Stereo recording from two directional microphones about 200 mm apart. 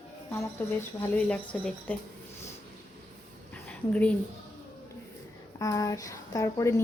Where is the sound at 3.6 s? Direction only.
5° left (ahead or behind).